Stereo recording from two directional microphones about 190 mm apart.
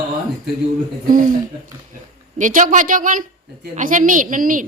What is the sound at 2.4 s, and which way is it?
A woman's voice, 45° right (ahead or behind).